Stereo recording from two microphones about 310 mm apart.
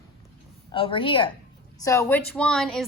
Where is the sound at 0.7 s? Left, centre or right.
Centre.